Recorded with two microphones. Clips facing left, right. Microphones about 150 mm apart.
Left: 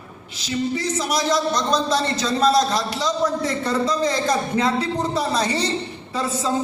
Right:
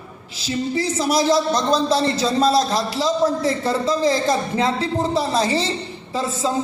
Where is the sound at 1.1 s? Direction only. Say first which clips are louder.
Right 4 dB; 30° right (ahead or behind).